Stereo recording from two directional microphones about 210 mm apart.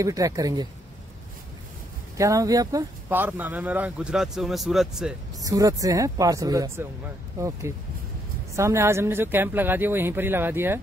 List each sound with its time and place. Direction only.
0.0 s speech: 15° right (ahead or behind)
2.1 s speech: 15° right (ahead or behind)
5.4 s speech: 15° right (ahead or behind)